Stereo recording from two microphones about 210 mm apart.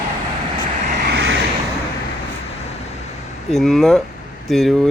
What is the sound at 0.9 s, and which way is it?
Vehicle, 55° right (ahead or behind).